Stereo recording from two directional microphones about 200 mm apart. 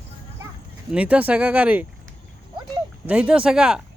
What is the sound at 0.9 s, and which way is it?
Speech, 5° right (ahead or behind).